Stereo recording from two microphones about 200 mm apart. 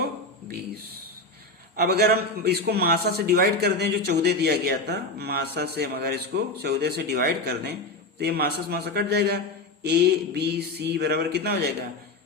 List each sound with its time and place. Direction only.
1.7 s a man's voice: 50° right (ahead or behind)